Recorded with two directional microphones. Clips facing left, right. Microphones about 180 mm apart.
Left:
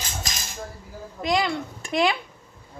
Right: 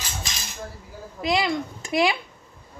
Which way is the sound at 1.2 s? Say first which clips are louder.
Even; 10° right (ahead or behind).